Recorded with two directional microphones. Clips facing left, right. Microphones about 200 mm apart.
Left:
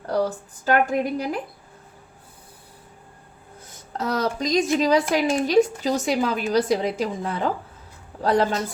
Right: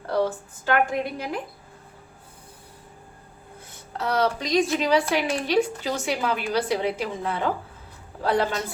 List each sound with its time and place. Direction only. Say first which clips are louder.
0.6 s a woman's voice: left 3 dB; 40° left (ahead or behind)
3.9 s a woman's voice: right 1 dB; 45° left (ahead or behind)